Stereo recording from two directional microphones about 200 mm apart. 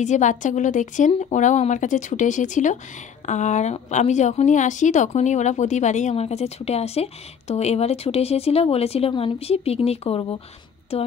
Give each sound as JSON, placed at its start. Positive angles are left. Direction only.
{"t": 0.0, "sound": "a woman's voice", "side_deg": 35}